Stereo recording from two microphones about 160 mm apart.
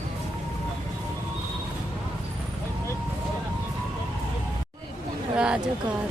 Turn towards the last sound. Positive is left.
turn(degrees=-5)  # may be behind; listen again after turning